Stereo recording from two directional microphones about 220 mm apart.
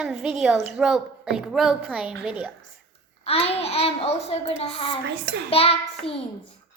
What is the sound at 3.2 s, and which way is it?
A child's voice, 25° left (ahead or behind).